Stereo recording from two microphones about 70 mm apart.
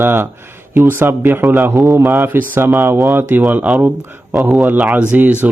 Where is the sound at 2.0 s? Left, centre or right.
Right.